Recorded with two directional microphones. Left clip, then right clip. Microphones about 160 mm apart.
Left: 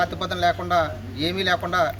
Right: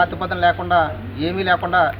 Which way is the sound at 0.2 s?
25° left (ahead or behind).